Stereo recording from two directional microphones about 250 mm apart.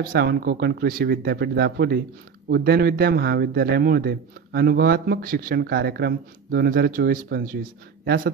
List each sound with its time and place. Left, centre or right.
0.0 s a man's voice: right